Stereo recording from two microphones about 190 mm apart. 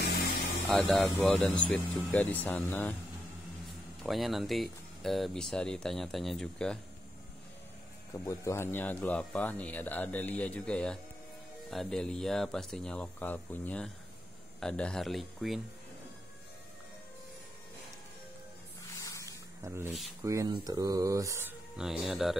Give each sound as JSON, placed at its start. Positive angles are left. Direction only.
{"t": 0.7, "sound": "speech", "side_deg": 0}
{"t": 4.0, "sound": "speech", "side_deg": 0}
{"t": 8.1, "sound": "speech", "side_deg": 15}
{"t": 19.2, "sound": "snake", "side_deg": -15}
{"t": 20.2, "sound": "speech", "side_deg": -20}
{"t": 21.7, "sound": "speech", "side_deg": 0}